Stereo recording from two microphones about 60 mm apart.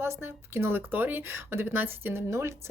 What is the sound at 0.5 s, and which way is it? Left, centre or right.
Speech, right.